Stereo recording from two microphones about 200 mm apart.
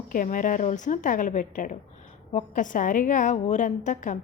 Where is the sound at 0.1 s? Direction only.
40° left (ahead or behind).